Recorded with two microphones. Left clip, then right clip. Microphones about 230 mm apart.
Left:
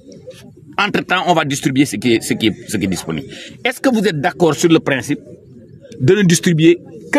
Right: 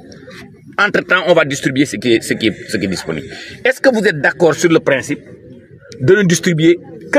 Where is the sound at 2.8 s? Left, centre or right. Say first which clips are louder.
Right 1 dB; left.